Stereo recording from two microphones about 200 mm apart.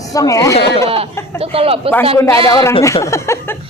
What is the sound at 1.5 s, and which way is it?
Speech, 30° right (ahead or behind).